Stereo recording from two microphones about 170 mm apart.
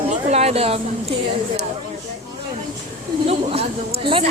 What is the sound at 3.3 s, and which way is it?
Speech, 35° right (ahead or behind).